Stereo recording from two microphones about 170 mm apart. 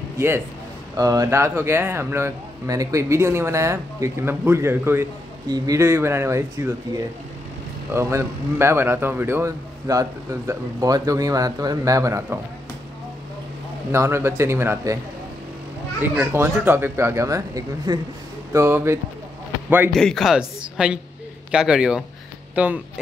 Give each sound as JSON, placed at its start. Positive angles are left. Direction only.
{"t": 0.9, "sound": "a man's voice", "side_deg": -20}
{"t": 7.9, "sound": "a man's voice", "side_deg": -15}
{"t": 13.9, "sound": "a man's voice", "side_deg": -15}
{"t": 16.2, "sound": "a man's voice", "side_deg": -15}
{"t": 19.9, "sound": "a woman's voice", "side_deg": 5}